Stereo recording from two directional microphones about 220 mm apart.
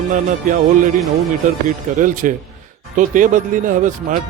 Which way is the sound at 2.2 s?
35° right (ahead or behind).